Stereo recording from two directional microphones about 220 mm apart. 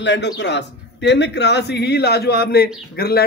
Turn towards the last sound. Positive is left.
turn(degrees=45)  # may be behind; listen again after turning